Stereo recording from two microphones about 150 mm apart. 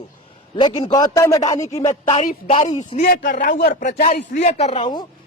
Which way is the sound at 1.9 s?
50° left (ahead or behind).